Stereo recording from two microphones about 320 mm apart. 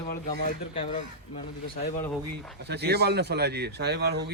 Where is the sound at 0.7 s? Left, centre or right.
Centre.